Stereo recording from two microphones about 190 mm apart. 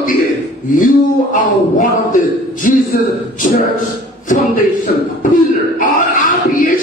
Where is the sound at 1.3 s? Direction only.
45° left (ahead or behind).